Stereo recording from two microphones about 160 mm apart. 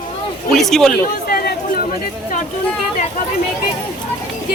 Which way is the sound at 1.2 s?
70° left (ahead or behind).